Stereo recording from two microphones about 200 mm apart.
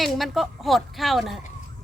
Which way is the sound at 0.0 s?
Centre (ahead or behind).